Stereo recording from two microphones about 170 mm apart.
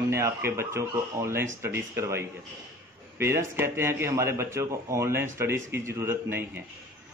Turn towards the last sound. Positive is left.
turn(degrees=-15)  # may be behind; listen again after turning